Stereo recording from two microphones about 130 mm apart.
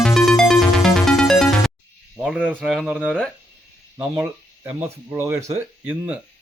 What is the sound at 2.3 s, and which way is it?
Speech, 10° right (ahead or behind).